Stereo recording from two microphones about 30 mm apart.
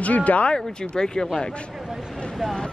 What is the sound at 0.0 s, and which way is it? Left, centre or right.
Speech, left.